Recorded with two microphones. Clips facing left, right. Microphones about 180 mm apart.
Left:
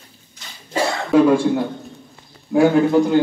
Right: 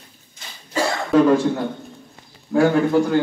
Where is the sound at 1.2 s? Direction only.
10° left (ahead or behind).